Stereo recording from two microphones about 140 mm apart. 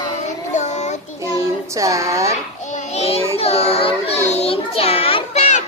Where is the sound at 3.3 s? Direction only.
45° left (ahead or behind).